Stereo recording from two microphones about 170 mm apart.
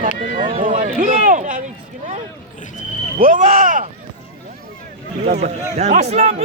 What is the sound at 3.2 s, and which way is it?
Speech, 50° right (ahead or behind).